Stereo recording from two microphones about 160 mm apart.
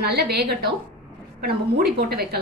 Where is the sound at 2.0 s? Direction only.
80° right.